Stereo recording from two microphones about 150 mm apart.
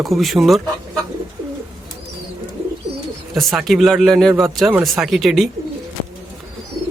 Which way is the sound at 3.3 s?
Centre (ahead or behind).